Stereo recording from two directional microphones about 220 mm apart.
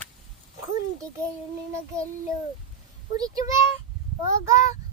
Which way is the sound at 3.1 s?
15° right (ahead or behind).